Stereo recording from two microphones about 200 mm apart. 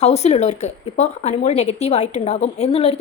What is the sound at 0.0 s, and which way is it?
A woman's voice, 35° left (ahead or behind).